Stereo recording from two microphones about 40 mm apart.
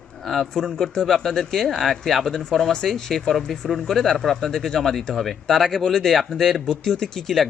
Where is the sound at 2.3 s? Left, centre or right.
Centre.